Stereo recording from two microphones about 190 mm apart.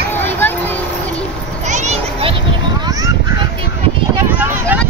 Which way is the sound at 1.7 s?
35° right (ahead or behind).